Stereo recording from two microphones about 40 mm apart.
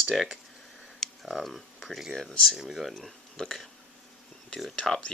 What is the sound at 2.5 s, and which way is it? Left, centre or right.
Speech, centre.